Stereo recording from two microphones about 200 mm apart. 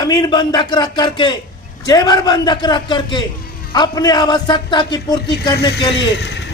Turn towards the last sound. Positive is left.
turn(degrees=60)  # may be behind; listen again after turning